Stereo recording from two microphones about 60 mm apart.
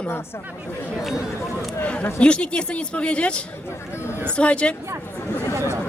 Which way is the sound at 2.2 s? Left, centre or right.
Centre.